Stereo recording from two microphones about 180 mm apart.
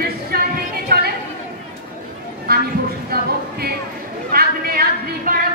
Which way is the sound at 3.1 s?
60° right (ahead or behind).